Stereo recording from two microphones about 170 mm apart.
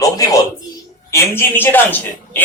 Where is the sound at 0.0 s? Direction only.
20° left (ahead or behind).